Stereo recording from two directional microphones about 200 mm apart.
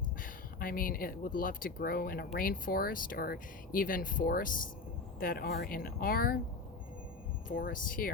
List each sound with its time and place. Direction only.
0.2 s speech: 45° left (ahead or behind)
7.4 s speech: 45° left (ahead or behind)